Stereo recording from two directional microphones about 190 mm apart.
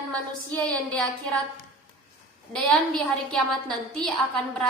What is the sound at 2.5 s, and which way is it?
A woman's voice, 5° left (ahead or behind).